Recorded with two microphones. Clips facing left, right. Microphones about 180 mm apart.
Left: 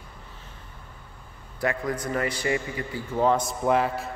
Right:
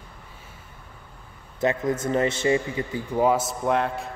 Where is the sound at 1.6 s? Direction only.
20° right (ahead or behind); by 4.1 s centre (ahead or behind).